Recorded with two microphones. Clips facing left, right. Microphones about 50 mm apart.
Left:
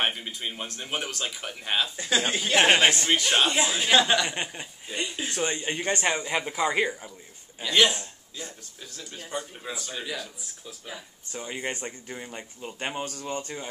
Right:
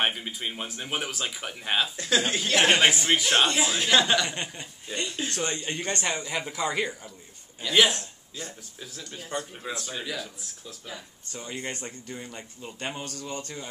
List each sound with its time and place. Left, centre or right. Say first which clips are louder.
0.0 s speech: right 1 dB; centre
2.0 s speech: even; centre
2.8 s speech: even; centre
4.3 s speech: left 2 dB; centre
7.7 s speech: even; centre
11.3 s speech: left 2 dB; centre